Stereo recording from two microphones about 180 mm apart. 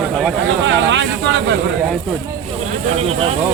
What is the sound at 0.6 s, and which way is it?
Speech, 90° right.